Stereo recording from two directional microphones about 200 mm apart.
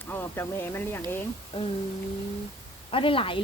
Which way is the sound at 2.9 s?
25° left (ahead or behind).